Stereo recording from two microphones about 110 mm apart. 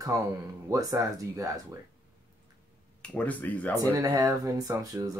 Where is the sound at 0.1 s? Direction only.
30° right (ahead or behind).